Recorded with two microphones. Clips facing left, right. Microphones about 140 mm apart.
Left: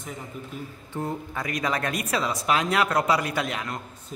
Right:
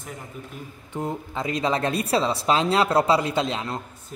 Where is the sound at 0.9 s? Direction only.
20° right (ahead or behind).